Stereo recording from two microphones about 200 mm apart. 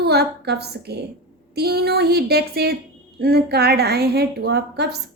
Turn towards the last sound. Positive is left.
turn(degrees=-55)  # may be behind; listen again after turning